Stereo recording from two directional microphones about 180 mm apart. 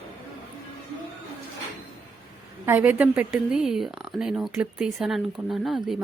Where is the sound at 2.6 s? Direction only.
10° right (ahead or behind).